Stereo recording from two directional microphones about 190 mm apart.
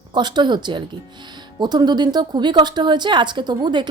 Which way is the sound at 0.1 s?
25° right (ahead or behind).